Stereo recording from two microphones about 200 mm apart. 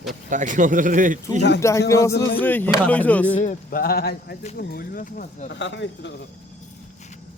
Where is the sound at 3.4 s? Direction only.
40° left (ahead or behind).